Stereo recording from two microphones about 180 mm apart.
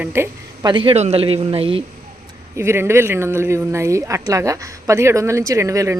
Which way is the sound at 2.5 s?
15° right (ahead or behind).